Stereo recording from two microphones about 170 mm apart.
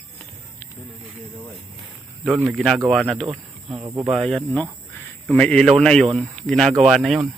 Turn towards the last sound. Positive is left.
turn(degrees=0)  # may be behind; listen again after turning